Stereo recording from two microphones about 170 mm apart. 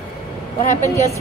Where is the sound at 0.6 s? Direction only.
45° left (ahead or behind).